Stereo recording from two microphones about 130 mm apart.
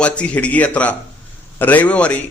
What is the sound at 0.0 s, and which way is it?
A man's voice, 10° left (ahead or behind).